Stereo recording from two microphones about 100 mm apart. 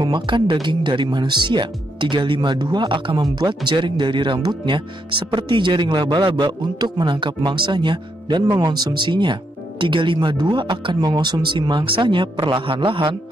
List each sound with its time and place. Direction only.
0.0 s a man's voice: 50° right (ahead or behind)